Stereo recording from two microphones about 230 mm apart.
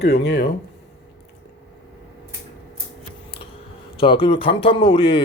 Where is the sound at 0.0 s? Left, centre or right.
Left.